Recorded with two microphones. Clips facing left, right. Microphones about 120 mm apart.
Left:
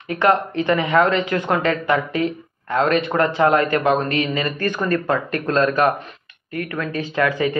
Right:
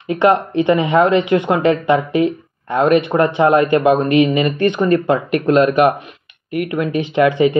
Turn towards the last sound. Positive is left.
turn(degrees=-20)  # may be behind; listen again after turning